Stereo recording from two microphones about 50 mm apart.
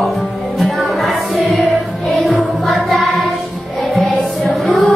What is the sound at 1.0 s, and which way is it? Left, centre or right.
Music, centre.